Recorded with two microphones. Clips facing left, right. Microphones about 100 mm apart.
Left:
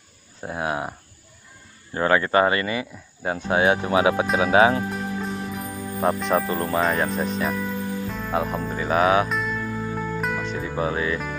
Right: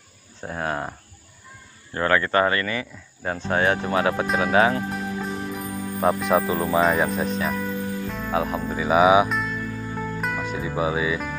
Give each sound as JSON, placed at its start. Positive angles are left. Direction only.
{"t": 0.4, "sound": "speech", "side_deg": 10}
{"t": 2.0, "sound": "speech", "side_deg": 15}
{"t": 4.9, "sound": "music", "side_deg": 0}
{"t": 8.1, "sound": "speech", "side_deg": 0}